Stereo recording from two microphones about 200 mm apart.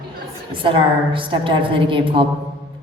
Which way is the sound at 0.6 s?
25° right (ahead or behind).